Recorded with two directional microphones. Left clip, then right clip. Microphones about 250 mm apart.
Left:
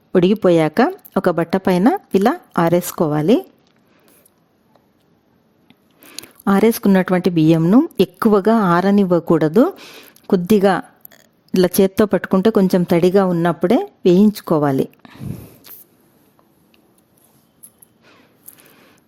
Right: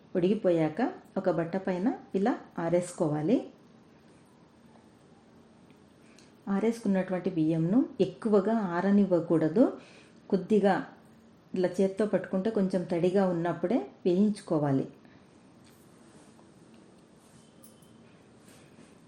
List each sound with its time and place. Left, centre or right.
0.1 s speech: left
6.1 s speech: left